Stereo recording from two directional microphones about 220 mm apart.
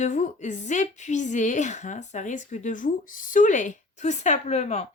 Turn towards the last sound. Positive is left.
turn(degrees=30)  # may be behind; listen again after turning